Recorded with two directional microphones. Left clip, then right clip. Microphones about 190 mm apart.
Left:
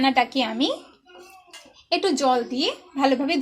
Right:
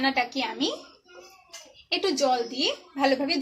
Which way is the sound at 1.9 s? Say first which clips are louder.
Left 3 dB; 35° left (ahead or behind).